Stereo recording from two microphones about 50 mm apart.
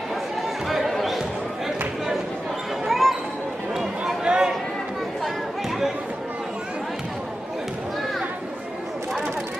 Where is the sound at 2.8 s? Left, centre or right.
Centre.